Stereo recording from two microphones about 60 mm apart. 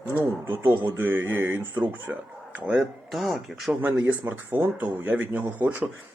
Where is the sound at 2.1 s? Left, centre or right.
Right.